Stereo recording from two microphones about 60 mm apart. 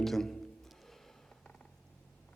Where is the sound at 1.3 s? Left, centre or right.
Centre.